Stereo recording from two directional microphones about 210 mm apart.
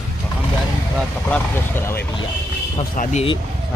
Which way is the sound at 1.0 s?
5° left (ahead or behind).